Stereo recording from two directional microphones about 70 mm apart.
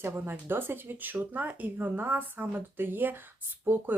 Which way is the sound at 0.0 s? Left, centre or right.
Right.